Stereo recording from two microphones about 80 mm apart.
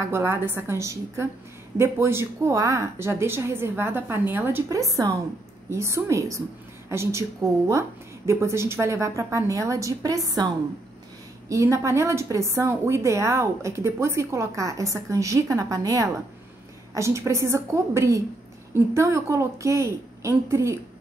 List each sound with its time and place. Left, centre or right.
0.0 s a woman's voice: right
4.6 s a woman's voice: right
11.4 s a woman's voice: right